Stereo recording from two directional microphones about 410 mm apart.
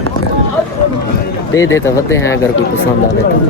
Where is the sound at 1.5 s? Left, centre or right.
Centre.